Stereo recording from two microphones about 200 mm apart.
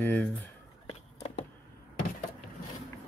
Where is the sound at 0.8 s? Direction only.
30° left (ahead or behind).